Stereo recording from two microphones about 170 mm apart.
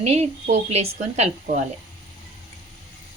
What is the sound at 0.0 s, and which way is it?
A woman's voice, 40° right (ahead or behind).